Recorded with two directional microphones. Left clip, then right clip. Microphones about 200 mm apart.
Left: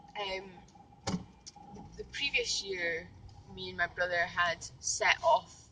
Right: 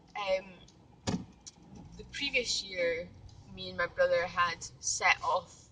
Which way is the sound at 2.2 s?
25° right (ahead or behind).